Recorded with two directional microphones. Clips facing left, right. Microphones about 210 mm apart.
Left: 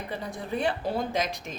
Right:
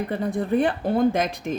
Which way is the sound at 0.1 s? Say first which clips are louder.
Right 8 dB; 55° right (ahead or behind).